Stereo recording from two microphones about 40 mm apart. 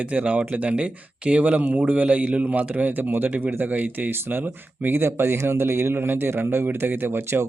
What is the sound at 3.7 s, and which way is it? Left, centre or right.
Speech, right.